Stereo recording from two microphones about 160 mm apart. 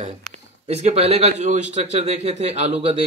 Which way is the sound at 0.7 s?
40° right (ahead or behind).